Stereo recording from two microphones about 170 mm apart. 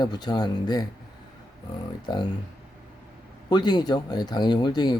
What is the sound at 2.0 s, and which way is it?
Speech, 25° left (ahead or behind).